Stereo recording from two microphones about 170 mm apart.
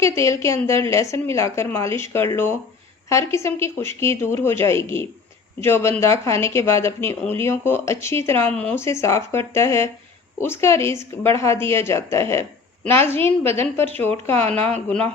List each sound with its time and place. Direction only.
0.0 s speech: 15° left (ahead or behind)